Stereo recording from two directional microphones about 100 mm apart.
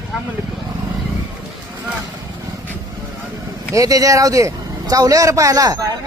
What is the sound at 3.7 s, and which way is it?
Speech, 35° right (ahead or behind).